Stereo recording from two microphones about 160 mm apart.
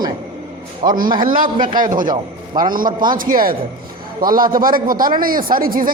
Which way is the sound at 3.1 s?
60° right (ahead or behind).